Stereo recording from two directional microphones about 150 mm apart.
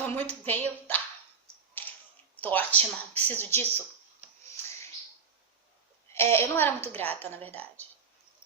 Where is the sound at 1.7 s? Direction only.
10° left (ahead or behind).